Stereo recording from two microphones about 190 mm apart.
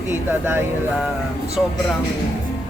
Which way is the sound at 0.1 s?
10° right (ahead or behind).